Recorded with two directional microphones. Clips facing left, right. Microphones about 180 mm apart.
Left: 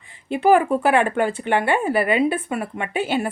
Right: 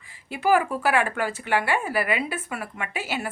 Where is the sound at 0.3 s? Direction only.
25° left (ahead or behind).